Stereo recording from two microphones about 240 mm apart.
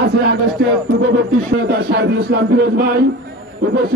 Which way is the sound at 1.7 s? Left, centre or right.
Right.